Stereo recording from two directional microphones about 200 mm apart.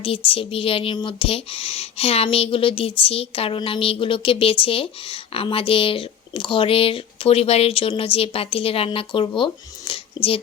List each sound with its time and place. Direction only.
0.3 s a woman's voice: 30° left (ahead or behind)